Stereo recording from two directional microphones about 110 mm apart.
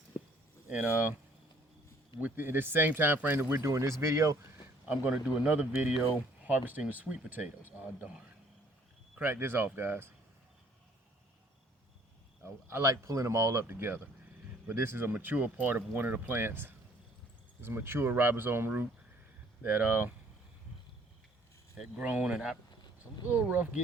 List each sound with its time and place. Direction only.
0.1 s a sound: 20° left (ahead or behind)
2.2 s speech: 20° right (ahead or behind)
4.9 s speech: 10° right (ahead or behind)
9.1 s speech: 20° right (ahead or behind)
12.4 s speech: 25° right (ahead or behind)
21.8 s speech: 10° right (ahead or behind)